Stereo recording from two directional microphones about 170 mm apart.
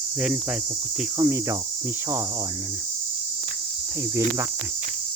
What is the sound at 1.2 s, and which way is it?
Cricket, 15° right (ahead or behind).